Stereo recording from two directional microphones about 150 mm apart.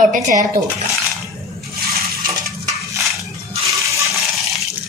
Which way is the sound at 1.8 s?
90° right.